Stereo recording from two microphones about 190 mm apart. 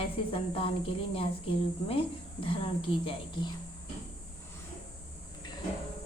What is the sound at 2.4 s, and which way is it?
A woman's voice, 30° left (ahead or behind).